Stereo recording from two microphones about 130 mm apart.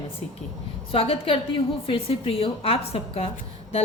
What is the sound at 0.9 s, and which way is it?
A woman's voice, 45° left (ahead or behind).